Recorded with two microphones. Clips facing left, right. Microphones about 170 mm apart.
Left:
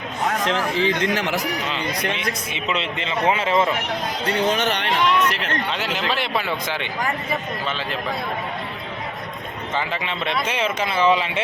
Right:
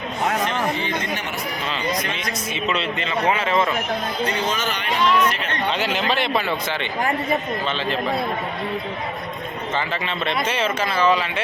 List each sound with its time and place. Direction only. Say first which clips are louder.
0.4 s speech: left 3 dB; 90° left
2.0 s speech: left 2 dB; 60° left (ahead or behind)
2.6 s speech: even; 20° left (ahead or behind)
4.5 s speech: left 4 dB; 70° left (ahead or behind)
6.1 s speech: right 1 dB; 5° left (ahead or behind)
9.7 s speech: even; 10° left (ahead or behind)